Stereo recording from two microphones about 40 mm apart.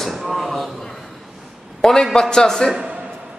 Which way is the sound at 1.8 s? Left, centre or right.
Centre.